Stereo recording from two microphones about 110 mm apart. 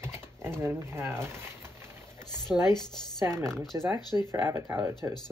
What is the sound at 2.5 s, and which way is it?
Speech, 40° left (ahead or behind).